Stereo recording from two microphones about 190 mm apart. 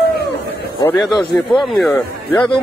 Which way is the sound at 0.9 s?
Centre (ahead or behind).